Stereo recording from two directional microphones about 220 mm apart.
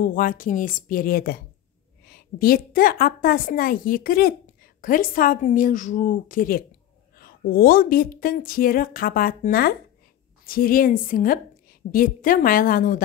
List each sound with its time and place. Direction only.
0.0 s a woman's voice: 40° left (ahead or behind)